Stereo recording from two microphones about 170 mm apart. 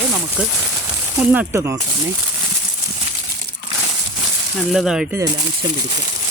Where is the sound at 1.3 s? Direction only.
10° right (ahead or behind).